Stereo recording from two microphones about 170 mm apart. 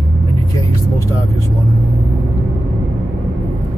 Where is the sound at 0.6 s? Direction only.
20° left (ahead or behind).